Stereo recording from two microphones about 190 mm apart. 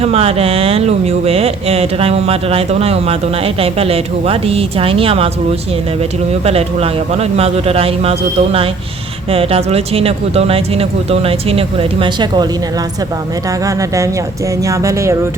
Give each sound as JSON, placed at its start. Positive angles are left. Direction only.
{"t": 0.0, "sound": "speech", "side_deg": -30}
{"t": 13.7, "sound": "speech", "side_deg": -15}